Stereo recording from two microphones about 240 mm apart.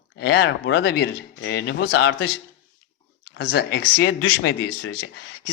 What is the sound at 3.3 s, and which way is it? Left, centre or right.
Speech, left.